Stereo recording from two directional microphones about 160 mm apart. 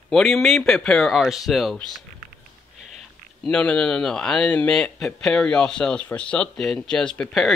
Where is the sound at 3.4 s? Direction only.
5° left (ahead or behind).